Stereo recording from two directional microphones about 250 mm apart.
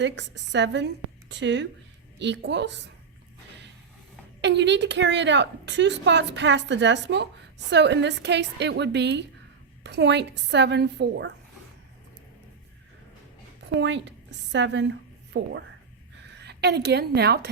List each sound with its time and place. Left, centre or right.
0.0 s a woman's voice: right
4.4 s a woman's voice: right
13.7 s a woman's voice: right